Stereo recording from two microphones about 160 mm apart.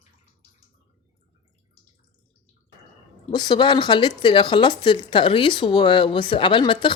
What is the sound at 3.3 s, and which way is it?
Speech, 30° left (ahead or behind).